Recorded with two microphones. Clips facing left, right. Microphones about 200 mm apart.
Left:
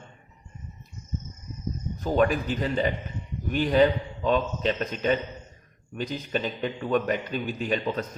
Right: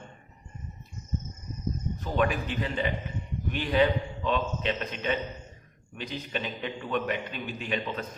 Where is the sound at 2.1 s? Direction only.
40° left (ahead or behind).